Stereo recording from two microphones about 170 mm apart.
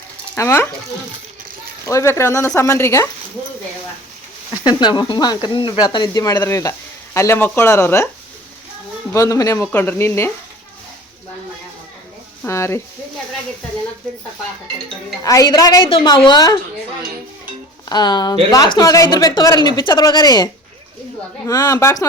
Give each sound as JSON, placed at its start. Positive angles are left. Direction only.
{"t": 0.3, "sound": "speech", "side_deg": 15}
{"t": 1.9, "sound": "speech", "side_deg": 15}
{"t": 4.5, "sound": "speech", "side_deg": 25}
{"t": 9.1, "sound": "speech", "side_deg": 20}
{"t": 12.5, "sound": "speech", "side_deg": 15}
{"t": 15.2, "sound": "speech", "side_deg": 20}
{"t": 17.8, "sound": "speech", "side_deg": 25}